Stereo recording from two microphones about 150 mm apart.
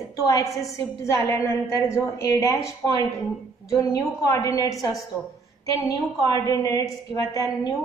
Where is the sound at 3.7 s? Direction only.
20° left (ahead or behind).